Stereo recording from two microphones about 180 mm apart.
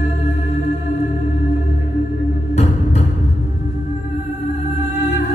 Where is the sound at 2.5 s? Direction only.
35° left (ahead or behind).